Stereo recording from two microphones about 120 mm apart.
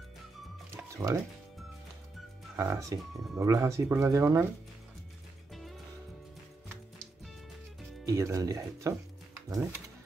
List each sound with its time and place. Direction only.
0.9 s speech: 25° right (ahead or behind)
2.5 s speech: 25° right (ahead or behind)
5.5 s music: centre (ahead or behind)
8.0 s speech: 25° right (ahead or behind)